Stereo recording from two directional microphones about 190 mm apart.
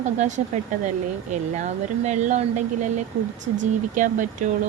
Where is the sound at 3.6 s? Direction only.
40° right (ahead or behind).